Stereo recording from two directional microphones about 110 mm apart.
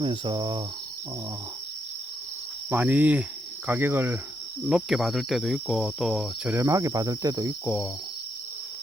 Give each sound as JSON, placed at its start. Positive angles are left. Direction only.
{"t": 0.0, "sound": "cricket", "side_deg": -45}
{"t": 2.6, "sound": "cricket", "side_deg": -15}
{"t": 3.7, "sound": "speech", "side_deg": -20}
{"t": 4.6, "sound": "cricket", "side_deg": -5}
{"t": 6.6, "sound": "cricket", "side_deg": -30}